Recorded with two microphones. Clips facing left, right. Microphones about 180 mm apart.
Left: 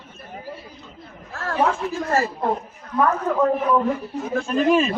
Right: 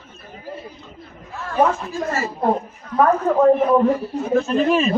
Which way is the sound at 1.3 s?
90° left.